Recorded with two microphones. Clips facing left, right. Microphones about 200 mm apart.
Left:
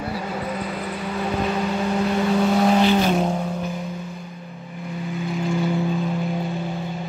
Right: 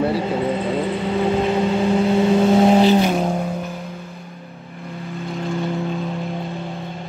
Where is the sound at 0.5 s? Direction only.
25° right (ahead or behind).